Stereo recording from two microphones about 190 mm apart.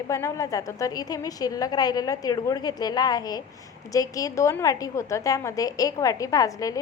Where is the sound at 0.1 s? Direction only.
15° left (ahead or behind).